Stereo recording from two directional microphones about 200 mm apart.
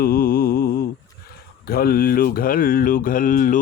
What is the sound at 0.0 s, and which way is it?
Mantra, 50° left (ahead or behind).